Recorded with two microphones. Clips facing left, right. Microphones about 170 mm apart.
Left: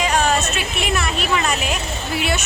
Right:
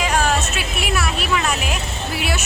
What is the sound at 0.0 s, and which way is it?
A woman's voice, 5° right (ahead or behind).